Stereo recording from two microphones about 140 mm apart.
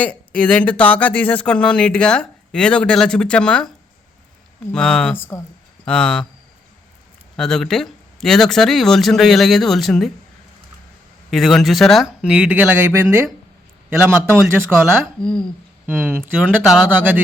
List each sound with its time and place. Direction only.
0.0 s speech: 10° left (ahead or behind)
4.7 s speech: 5° left (ahead or behind)
7.3 s speech: 5° left (ahead or behind)
11.3 s speech: centre (ahead or behind); by 14.9 s 15° right (ahead or behind)
15.2 s speech: 5° left (ahead or behind)
15.9 s speech: 15° right (ahead or behind)